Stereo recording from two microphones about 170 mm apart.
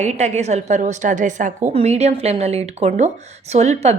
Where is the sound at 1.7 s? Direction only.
35° right (ahead or behind).